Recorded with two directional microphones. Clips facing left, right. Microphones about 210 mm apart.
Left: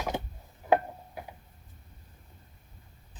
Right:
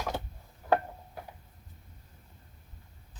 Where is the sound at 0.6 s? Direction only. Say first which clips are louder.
Left 2 dB; 15° left (ahead or behind).